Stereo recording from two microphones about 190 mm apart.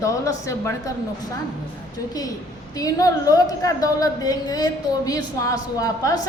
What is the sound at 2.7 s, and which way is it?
A woman's voice, 20° left (ahead or behind).